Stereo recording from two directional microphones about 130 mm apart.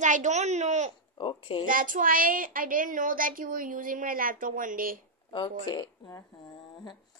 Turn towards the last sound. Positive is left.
turn(degrees=35)  # may be behind; listen again after turning